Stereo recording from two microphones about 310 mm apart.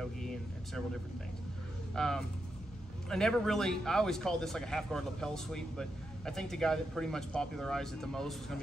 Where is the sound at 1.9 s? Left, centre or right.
Centre.